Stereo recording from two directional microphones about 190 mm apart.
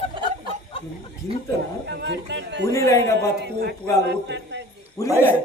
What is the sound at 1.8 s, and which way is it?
Speech, 60° right (ahead or behind).